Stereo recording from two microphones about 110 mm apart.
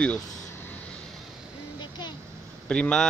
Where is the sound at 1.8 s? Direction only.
40° left (ahead or behind).